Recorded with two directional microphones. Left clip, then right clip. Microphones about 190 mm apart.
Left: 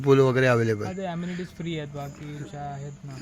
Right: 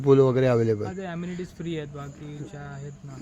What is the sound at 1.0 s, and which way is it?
Speech, 50° left (ahead or behind).